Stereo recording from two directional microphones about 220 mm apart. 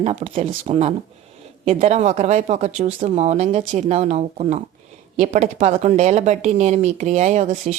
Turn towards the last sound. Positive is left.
turn(degrees=-30)  # may be behind; listen again after turning